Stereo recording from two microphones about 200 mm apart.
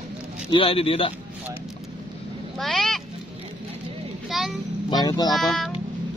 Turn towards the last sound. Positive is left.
turn(degrees=0)  # may be behind; listen again after turning